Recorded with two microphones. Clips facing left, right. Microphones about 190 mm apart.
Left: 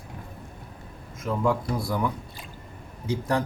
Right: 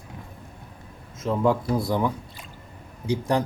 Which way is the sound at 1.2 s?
25° right (ahead or behind).